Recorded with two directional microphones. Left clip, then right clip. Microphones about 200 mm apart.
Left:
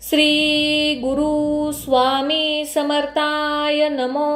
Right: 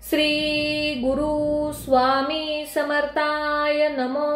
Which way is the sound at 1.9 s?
30° left (ahead or behind).